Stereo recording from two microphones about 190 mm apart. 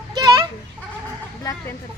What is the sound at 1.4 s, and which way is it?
Speech, 15° left (ahead or behind).